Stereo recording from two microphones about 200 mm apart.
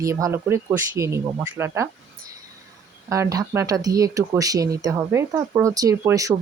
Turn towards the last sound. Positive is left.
turn(degrees=-15)  # may be behind; listen again after turning